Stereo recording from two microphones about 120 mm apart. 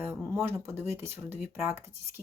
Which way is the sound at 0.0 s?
15° right (ahead or behind).